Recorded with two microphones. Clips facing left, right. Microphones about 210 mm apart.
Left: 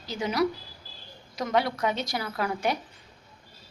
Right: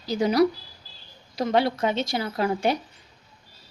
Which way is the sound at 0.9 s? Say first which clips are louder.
Left 3 dB; 55° left (ahead or behind).